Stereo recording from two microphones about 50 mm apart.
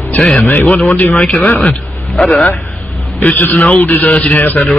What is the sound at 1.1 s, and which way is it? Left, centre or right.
Speech, left.